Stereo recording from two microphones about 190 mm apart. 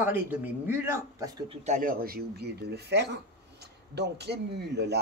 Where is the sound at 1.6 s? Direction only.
40° right (ahead or behind).